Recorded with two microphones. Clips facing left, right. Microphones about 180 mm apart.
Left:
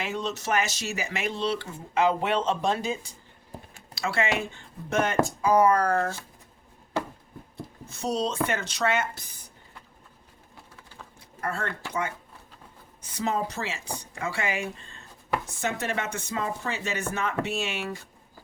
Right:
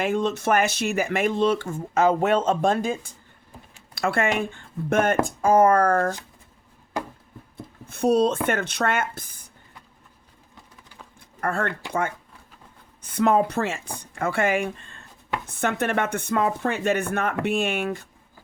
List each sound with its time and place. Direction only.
0.0 s speech: 50° right (ahead or behind)
7.9 s speech: 55° right (ahead or behind)
11.3 s speech: 55° right (ahead or behind)
13.0 s speech: 55° right (ahead or behind)